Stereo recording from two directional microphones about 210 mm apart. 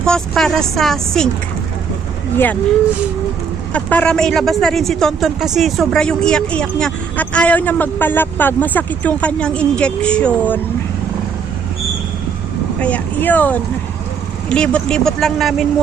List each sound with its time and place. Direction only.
0.0 s a man's voice: 5° left (ahead or behind)
3.7 s a man's voice: 5° left (ahead or behind)
12.8 s a man's voice: 5° left (ahead or behind)